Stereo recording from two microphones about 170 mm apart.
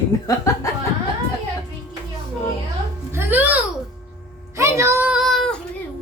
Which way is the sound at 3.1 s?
10° right (ahead or behind).